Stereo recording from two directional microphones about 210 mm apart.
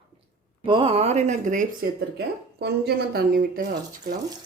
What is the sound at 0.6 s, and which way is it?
Speech, 25° right (ahead or behind).